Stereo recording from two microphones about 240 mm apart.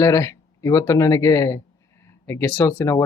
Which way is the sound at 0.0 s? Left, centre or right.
Centre.